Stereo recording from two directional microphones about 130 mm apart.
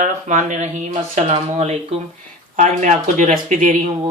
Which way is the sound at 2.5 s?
70° right (ahead or behind).